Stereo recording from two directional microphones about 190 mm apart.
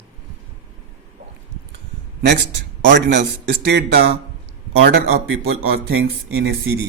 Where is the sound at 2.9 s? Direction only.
65° right (ahead or behind); by 6.8 s 90° right.